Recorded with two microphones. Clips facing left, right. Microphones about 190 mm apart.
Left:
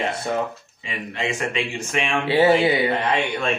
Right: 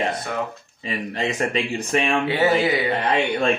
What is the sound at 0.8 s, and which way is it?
Speech, 40° right (ahead or behind).